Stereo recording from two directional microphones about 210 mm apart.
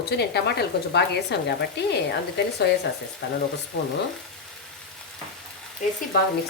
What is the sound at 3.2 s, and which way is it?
Speech, 55° left (ahead or behind).